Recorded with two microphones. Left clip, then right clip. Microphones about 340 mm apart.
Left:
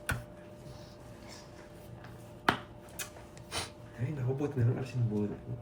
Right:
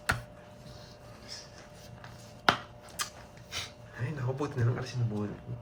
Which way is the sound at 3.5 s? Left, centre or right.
Centre.